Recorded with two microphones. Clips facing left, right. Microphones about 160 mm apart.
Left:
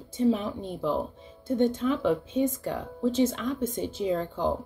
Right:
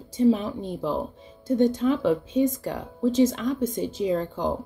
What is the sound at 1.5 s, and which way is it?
Speech, 40° right (ahead or behind).